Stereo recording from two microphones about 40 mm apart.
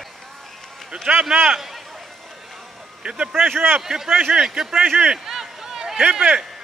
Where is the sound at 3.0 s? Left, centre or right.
Right.